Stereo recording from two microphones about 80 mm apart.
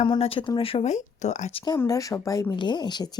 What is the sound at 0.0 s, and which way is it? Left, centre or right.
Speech, left.